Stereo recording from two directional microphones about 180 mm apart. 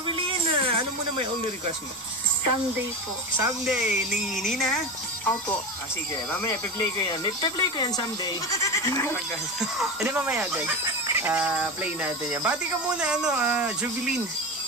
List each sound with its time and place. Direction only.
0.0 s a sound: 30° right (ahead or behind)
3.6 s speech: 5° right (ahead or behind)
6.3 s speech: 20° left (ahead or behind)
9.1 s speech: centre (ahead or behind)